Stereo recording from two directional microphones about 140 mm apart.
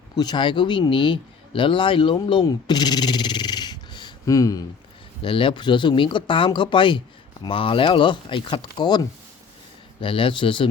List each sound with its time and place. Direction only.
0.2 s speech: 30° left (ahead or behind)
5.2 s speech: 40° left (ahead or behind)